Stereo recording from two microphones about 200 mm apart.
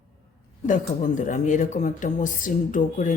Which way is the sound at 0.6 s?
40° left (ahead or behind).